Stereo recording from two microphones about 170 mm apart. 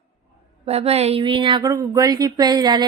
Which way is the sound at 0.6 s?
35° right (ahead or behind).